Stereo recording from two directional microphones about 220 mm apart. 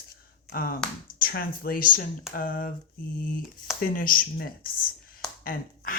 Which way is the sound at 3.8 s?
40° left (ahead or behind).